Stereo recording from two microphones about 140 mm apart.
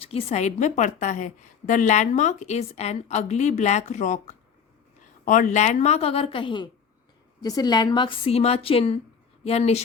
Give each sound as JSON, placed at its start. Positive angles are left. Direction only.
{"t": 0.0, "sound": "a woman's voice", "side_deg": 45}